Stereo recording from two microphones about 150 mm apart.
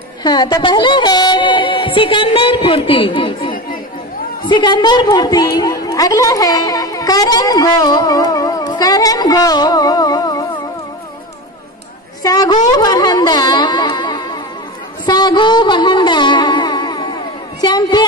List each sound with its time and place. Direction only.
0.2 s a woman's voice: 30° left (ahead or behind)
12.2 s a woman's voice: 25° left (ahead or behind)
12.7 s music: 25° left (ahead or behind)
17.6 s a woman's voice: 30° left (ahead or behind)